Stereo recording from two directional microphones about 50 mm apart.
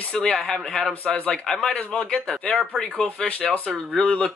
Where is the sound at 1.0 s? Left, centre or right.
Left.